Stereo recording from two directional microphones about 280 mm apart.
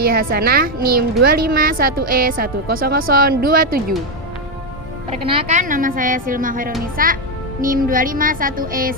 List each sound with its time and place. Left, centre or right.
0.0 s a woman's voice: right
5.1 s a woman's voice: centre